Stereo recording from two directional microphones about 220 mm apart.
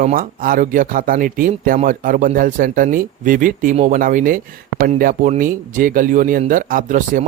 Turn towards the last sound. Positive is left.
turn(degrees=-35)  # may be behind; listen again after turning